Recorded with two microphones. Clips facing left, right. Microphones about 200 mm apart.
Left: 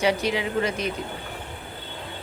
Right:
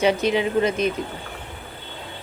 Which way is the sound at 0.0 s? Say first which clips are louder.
Right 4 dB; 20° right (ahead or behind).